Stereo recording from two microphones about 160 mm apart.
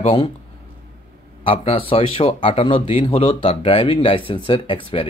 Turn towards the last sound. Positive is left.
turn(degrees=30)  # may be behind; listen again after turning